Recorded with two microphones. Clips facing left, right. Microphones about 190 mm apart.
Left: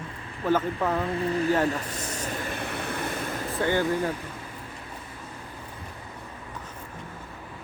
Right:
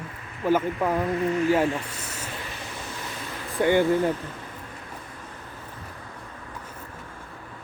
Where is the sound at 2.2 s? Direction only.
45° left (ahead or behind).